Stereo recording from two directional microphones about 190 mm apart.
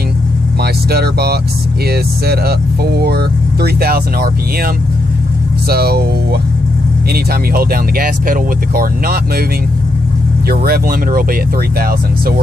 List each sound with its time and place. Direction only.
0.6 s speech: 55° right (ahead or behind)
10.5 s speech: 50° right (ahead or behind)